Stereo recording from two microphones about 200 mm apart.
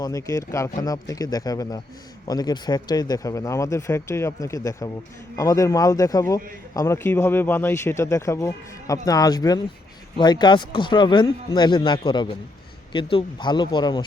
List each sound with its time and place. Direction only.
0.0 s a man's voice: 15° left (ahead or behind)